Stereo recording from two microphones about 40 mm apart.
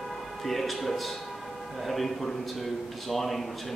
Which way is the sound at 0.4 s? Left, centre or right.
Centre.